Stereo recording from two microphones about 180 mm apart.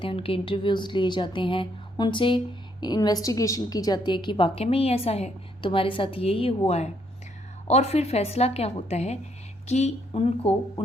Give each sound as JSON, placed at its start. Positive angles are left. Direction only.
{"t": 0.0, "sound": "a woman's voice", "side_deg": 30}